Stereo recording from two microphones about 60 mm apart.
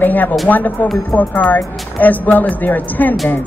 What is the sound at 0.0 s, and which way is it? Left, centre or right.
Speech, left.